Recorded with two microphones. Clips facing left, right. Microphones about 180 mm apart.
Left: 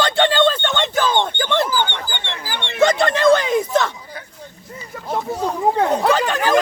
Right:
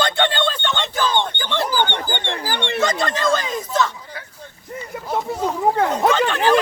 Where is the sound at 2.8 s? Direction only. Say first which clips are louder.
Left 8 dB; 60° left (ahead or behind).